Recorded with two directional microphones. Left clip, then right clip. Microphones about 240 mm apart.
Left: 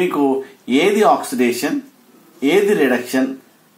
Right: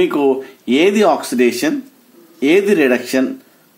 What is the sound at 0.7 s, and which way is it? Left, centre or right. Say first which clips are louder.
Speech: right 1 dB; right.